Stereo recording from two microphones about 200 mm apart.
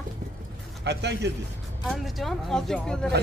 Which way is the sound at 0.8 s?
60° right (ahead or behind).